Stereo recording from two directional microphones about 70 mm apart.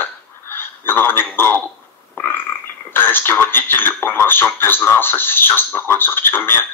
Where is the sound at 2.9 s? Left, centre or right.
Left.